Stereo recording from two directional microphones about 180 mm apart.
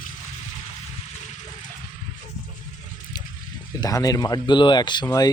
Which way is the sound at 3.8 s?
20° left (ahead or behind).